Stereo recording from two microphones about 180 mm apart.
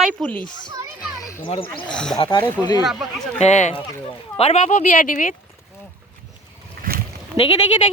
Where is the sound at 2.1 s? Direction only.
25° left (ahead or behind).